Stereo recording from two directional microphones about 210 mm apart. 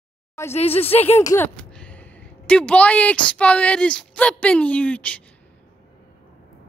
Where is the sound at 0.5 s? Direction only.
30° left (ahead or behind).